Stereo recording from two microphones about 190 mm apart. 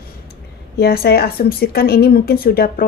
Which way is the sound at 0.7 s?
55° left (ahead or behind).